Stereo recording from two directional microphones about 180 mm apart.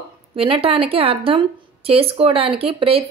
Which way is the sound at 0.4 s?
30° right (ahead or behind).